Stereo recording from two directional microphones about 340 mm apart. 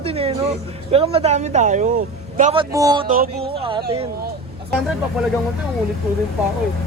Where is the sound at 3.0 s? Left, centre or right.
Right.